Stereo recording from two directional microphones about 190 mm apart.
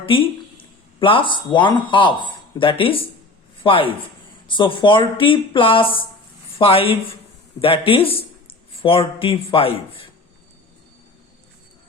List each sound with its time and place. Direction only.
0.0 s a man's voice: 30° left (ahead or behind)